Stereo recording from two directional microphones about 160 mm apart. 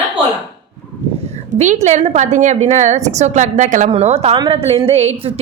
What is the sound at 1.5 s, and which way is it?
A woman's voice, 50° right (ahead or behind).